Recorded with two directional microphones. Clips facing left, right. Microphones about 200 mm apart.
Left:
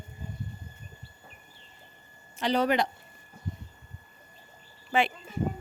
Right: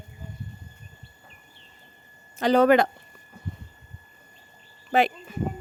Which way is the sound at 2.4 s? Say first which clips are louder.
Right 8 dB; 50° right (ahead or behind).